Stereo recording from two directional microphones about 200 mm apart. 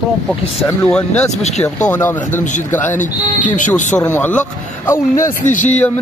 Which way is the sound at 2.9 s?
40° left (ahead or behind).